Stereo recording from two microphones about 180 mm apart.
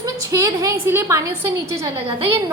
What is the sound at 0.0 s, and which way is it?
A woman's voice, 20° right (ahead or behind).